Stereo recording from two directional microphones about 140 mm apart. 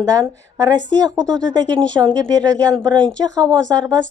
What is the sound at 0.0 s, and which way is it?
Speech, 25° right (ahead or behind).